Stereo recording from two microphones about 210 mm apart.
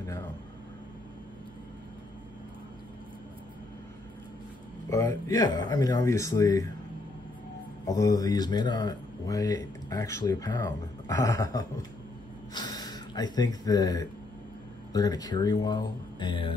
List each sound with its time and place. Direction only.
4.8 s speech: 15° left (ahead or behind)
7.8 s speech: 15° left (ahead or behind)